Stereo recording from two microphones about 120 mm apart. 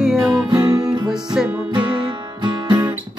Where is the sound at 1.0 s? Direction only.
5° right (ahead or behind).